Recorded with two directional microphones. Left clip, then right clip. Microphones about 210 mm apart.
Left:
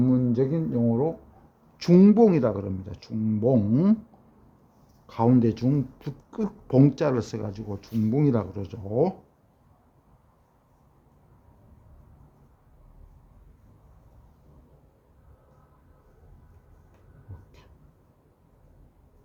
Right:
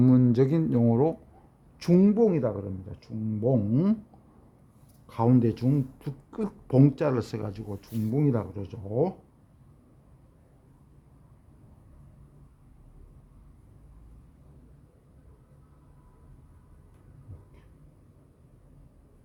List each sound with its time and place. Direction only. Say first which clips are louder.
0.0 s speech: right 1 dB; 25° right (ahead or behind)
1.8 s speech: left 4 dB; centre (ahead or behind)
5.0 s speech: left 2 dB; 5° right (ahead or behind)